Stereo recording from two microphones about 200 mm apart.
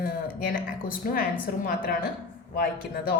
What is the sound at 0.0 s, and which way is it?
Speech, 45° left (ahead or behind).